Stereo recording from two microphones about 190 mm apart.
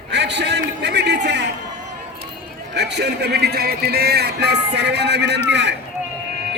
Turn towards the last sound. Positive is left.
turn(degrees=-65)  # may be behind; listen again after turning